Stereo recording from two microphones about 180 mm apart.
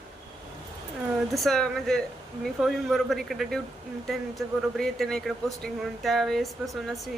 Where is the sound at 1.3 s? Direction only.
Centre (ahead or behind).